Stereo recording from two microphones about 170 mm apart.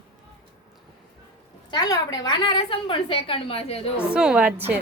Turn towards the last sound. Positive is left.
turn(degrees=-10)  # may be behind; listen again after turning